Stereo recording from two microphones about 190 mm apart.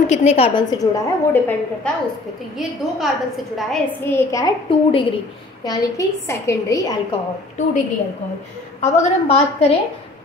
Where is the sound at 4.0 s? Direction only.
10° left (ahead or behind).